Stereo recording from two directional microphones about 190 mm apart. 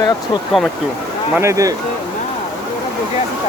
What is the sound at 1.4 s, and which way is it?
Speech, 15° right (ahead or behind).